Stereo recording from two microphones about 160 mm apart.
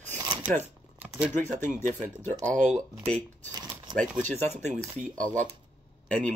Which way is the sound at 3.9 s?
30° right (ahead or behind).